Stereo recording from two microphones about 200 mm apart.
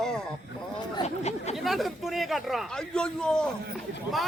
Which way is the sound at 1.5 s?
Centre (ahead or behind).